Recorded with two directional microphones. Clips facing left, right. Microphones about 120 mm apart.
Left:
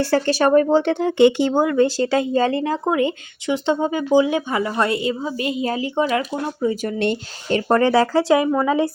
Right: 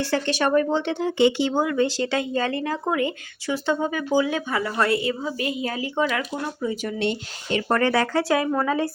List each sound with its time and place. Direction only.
0.0 s speech: 40° left (ahead or behind)
6.7 s speech: 45° left (ahead or behind)
7.7 s speech: 30° left (ahead or behind)